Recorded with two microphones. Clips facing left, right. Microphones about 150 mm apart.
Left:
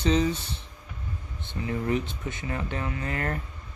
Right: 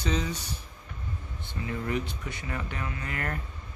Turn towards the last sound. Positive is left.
turn(degrees=30)  # may be behind; listen again after turning